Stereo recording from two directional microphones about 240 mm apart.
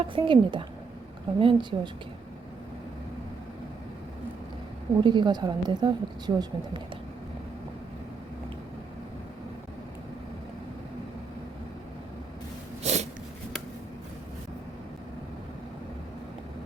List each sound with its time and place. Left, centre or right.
0.0 s a woman's voice: right
4.9 s a woman's voice: centre
12.8 s a sound: right